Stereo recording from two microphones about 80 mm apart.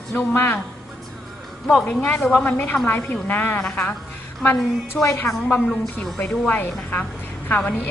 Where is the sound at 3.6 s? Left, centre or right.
Centre.